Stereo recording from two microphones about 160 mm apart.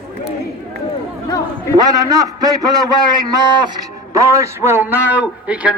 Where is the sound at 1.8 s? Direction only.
25° right (ahead or behind).